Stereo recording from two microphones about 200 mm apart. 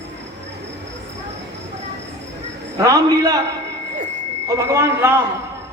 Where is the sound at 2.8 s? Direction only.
15° right (ahead or behind).